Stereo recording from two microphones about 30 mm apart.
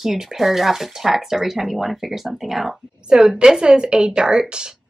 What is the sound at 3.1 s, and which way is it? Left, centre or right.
A woman's voice, right.